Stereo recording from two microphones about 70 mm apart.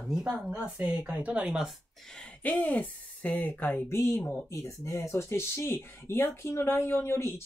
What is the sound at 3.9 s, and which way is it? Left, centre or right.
Speech, left.